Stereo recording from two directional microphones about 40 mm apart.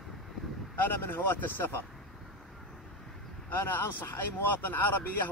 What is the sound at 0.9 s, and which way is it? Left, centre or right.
Speech, left.